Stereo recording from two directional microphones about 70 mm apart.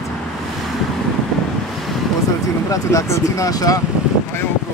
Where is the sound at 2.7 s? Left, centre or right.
Left.